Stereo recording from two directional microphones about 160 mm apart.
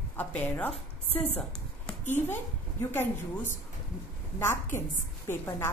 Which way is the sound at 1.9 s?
15° left (ahead or behind).